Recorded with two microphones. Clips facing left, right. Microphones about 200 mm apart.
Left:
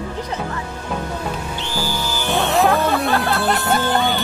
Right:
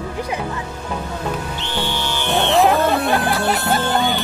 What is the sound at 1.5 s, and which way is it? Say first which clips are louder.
Music: even; centre (ahead or behind).